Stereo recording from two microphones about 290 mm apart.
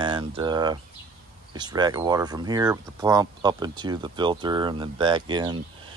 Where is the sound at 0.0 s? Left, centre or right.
Centre.